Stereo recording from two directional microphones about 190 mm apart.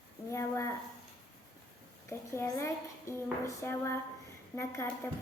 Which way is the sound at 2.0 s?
15° left (ahead or behind).